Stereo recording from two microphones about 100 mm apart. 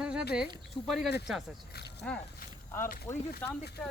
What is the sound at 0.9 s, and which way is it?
Speech, 5° right (ahead or behind).